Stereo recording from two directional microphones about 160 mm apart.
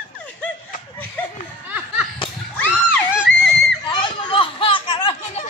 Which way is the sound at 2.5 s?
10° left (ahead or behind).